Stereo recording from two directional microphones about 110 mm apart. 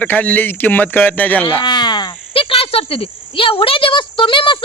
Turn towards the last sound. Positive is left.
turn(degrees=50)  # may be behind; listen again after turning